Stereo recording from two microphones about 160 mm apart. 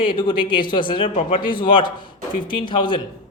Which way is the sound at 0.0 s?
30° left (ahead or behind).